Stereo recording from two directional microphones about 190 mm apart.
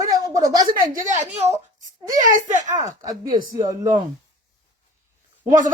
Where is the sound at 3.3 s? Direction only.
45° right (ahead or behind).